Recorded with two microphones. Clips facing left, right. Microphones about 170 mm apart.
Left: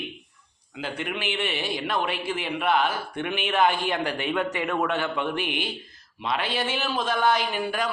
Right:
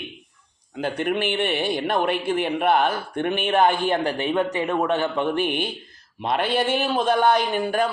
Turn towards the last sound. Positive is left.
turn(degrees=-45)  # may be behind; listen again after turning